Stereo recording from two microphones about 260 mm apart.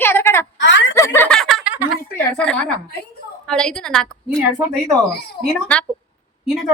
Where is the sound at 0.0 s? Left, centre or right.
Centre.